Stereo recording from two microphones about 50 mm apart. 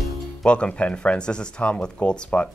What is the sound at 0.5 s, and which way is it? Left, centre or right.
Speech, left.